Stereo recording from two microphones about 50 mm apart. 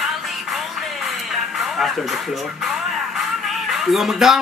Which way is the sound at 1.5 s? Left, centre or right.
Centre.